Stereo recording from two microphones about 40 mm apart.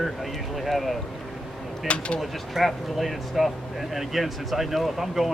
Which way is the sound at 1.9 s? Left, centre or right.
Left.